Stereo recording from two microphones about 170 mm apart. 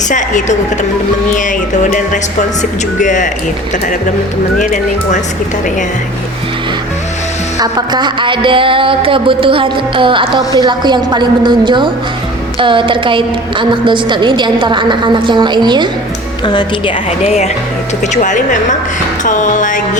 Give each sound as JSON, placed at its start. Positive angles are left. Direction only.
{"t": 0.1, "sound": "speech", "side_deg": 45}
{"t": 2.6, "sound": "speech", "side_deg": 45}
{"t": 4.6, "sound": "speech", "side_deg": 45}
{"t": 7.6, "sound": "a sound", "side_deg": -25}
{"t": 16.5, "sound": "speech", "side_deg": 25}
{"t": 17.2, "sound": "speech", "side_deg": 40}
{"t": 19.2, "sound": "music", "side_deg": 45}